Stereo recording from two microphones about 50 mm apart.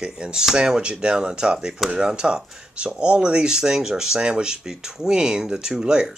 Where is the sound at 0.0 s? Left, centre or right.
Centre.